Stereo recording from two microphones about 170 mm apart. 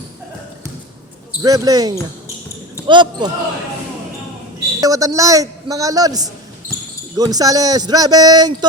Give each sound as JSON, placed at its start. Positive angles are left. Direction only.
{"t": 1.4, "sound": "a man's voice", "side_deg": -20}
{"t": 4.8, "sound": "a man's voice", "side_deg": -20}